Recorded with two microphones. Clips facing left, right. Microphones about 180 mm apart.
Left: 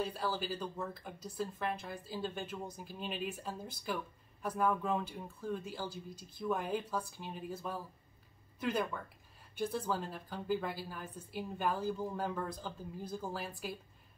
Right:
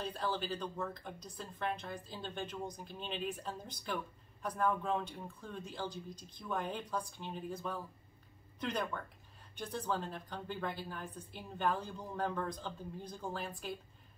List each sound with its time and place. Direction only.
0.0 s speech: 10° left (ahead or behind)